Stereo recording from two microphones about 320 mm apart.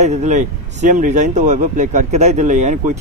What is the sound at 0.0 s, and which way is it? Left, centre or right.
Speech, right.